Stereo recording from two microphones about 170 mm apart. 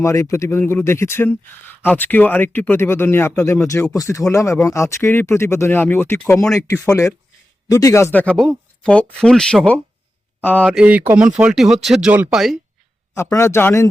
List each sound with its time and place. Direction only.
0.0 s speech: 15° left (ahead or behind)
10.7 s speech: 5° right (ahead or behind)
13.3 s speech: 15° left (ahead or behind)